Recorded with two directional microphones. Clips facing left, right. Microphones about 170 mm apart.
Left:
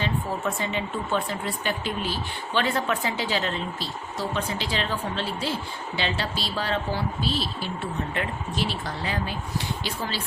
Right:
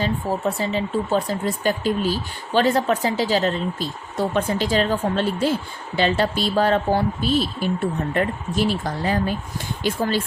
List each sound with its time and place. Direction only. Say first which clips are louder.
0.0 s speech: right 5 dB; 40° right (ahead or behind)
4.2 s speech: right 8 dB; 50° right (ahead or behind)